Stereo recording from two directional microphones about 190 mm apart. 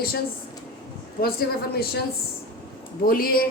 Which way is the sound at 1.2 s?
55° left (ahead or behind).